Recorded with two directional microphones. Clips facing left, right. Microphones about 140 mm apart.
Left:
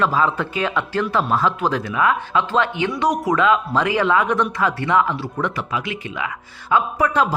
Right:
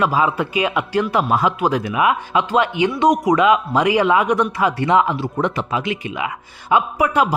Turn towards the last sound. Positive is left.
turn(degrees=-10)  # may be behind; listen again after turning